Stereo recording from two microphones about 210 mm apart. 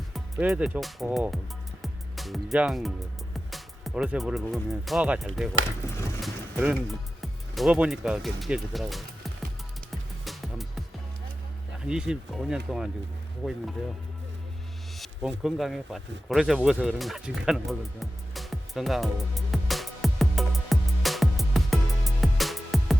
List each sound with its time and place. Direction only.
0.1 s speech: 5° right (ahead or behind)
1.8 s music: centre (ahead or behind)
3.3 s speech: centre (ahead or behind)
5.8 s a sound: 15° left (ahead or behind)
6.2 s vehicle: 5° right (ahead or behind)
7.2 s speech: centre (ahead or behind)
9.9 s music: centre (ahead or behind)
11.9 s speech: 5° right (ahead or behind)
14.9 s a sound: centre (ahead or behind)